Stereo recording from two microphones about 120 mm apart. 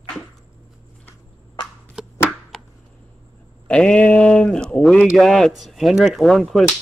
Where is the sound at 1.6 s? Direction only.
40° left (ahead or behind).